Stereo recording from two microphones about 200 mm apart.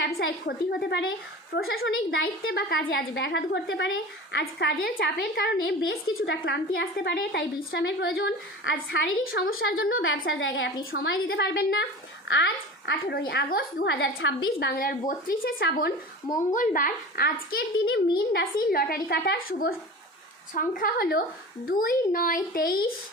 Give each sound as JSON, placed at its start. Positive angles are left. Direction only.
{"t": 0.0, "sound": "a woman's voice", "side_deg": 55}
{"t": 2.2, "sound": "a woman's voice", "side_deg": 50}
{"t": 6.7, "sound": "a woman's voice", "side_deg": 55}
{"t": 9.6, "sound": "a woman's voice", "side_deg": 85}
{"t": 10.9, "sound": "a child's voice", "side_deg": 50}